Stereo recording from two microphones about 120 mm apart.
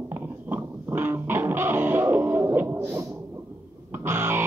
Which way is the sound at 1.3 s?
20° right (ahead or behind).